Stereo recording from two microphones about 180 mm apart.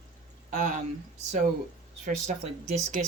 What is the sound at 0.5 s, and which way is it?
Speech, 45° right (ahead or behind).